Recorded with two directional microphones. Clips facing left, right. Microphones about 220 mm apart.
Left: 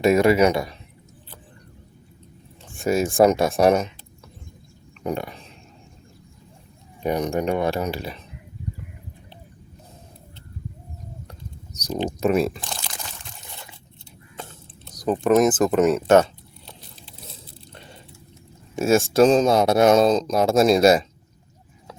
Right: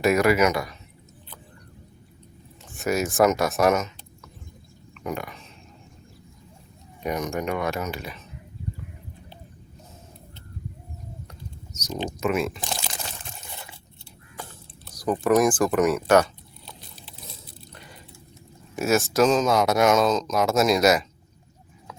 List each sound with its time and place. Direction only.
0.0 s speech: 25° left (ahead or behind)
2.7 s speech: 30° left (ahead or behind)
5.0 s speech: 30° left (ahead or behind)
7.0 s speech: 35° left (ahead or behind)
12.0 s speech: 35° left (ahead or behind)
14.4 s a sound: 25° left (ahead or behind)
14.8 s speech: 20° left (ahead or behind)
18.8 s speech: 30° left (ahead or behind)